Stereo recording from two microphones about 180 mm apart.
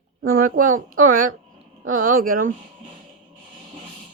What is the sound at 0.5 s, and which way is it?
Speech, 50° right (ahead or behind).